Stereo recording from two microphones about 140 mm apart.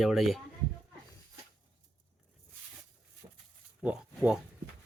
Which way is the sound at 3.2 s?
50° right (ahead or behind).